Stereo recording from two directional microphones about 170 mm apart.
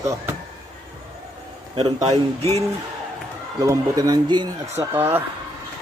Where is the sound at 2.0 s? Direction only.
35° right (ahead or behind).